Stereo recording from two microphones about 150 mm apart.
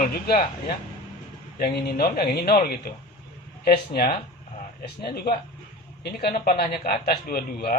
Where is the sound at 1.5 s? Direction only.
90° left.